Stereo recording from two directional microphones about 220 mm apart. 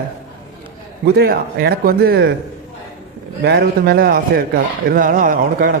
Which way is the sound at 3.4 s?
45° right (ahead or behind).